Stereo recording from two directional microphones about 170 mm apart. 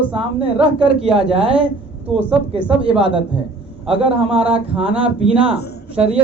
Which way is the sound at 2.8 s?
30° right (ahead or behind).